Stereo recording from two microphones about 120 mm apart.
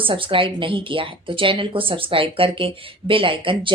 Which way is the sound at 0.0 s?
45° right (ahead or behind).